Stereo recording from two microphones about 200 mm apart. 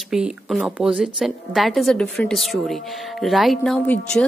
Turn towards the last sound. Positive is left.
turn(degrees=5)  # may be behind; listen again after turning